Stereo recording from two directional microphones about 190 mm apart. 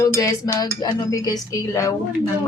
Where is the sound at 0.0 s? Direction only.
20° left (ahead or behind).